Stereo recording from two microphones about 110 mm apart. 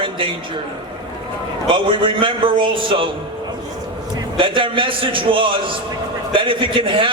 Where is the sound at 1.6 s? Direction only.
50° right (ahead or behind).